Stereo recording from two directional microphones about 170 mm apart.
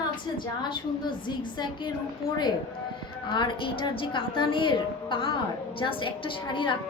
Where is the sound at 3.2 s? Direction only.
25° left (ahead or behind).